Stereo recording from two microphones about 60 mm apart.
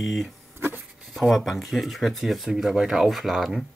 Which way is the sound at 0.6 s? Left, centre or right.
Right.